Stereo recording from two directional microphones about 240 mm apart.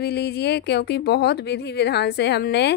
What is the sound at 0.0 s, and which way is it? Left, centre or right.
A woman's voice, left.